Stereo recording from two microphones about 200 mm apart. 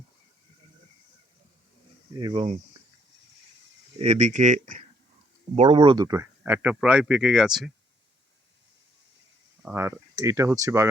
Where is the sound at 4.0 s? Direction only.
35° right (ahead or behind).